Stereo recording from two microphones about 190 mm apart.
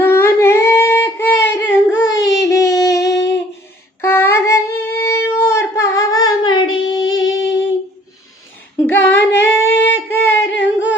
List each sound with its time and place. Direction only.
0.0 s singing: 10° left (ahead or behind)
2.2 s child singing: 15° left (ahead or behind)
3.0 s a sound: 65° left (ahead or behind)
4.0 s child singing: 15° left (ahead or behind)
8.9 s female singing: 10° left (ahead or behind)
10.1 s singing: 10° left (ahead or behind)
10.5 s humming: 75° left (ahead or behind)